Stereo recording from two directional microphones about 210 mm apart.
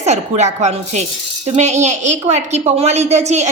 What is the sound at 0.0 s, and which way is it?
A woman's voice, 35° right (ahead or behind).